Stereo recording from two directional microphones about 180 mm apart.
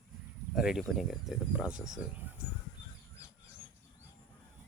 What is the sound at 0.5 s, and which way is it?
Speech, centre (ahead or behind).